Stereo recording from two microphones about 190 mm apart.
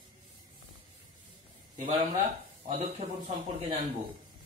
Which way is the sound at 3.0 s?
35° right (ahead or behind).